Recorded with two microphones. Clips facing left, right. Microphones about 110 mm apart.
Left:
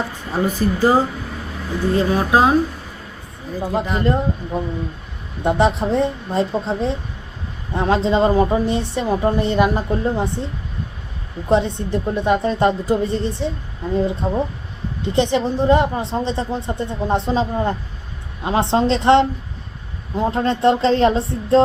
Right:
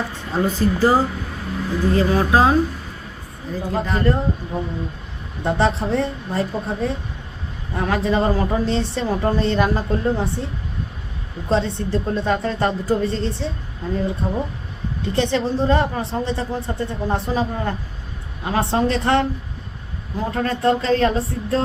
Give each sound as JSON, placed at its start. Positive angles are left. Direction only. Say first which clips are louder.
{"t": 0.3, "sound": "speech", "louder": "even", "side_deg": 10}
{"t": 3.7, "sound": "speech", "louder": "left 1 dB", "side_deg": 15}